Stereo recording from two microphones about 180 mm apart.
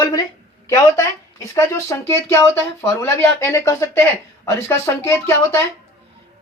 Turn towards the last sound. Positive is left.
turn(degrees=15)  # may be behind; listen again after turning